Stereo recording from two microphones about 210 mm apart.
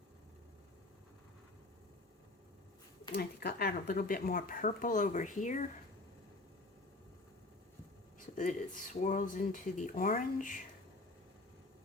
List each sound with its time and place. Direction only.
3.2 s speech: 45° left (ahead or behind)
8.4 s speech: 35° left (ahead or behind)